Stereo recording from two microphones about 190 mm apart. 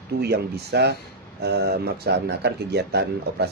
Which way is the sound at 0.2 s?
60° right (ahead or behind).